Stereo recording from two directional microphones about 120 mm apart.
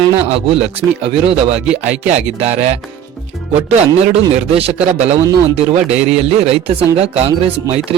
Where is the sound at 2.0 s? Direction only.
65° right (ahead or behind).